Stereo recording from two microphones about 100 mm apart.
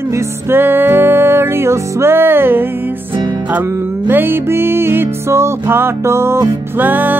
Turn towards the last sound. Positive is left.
turn(degrees=-20)  # may be behind; listen again after turning